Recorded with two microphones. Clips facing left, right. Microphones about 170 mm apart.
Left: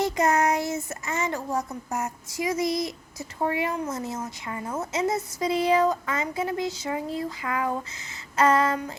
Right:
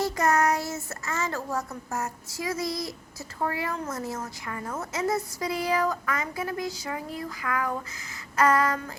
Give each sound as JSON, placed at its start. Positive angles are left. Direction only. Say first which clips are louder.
{"t": 0.0, "sound": "child singing", "louder": "left 1 dB", "side_deg": 20}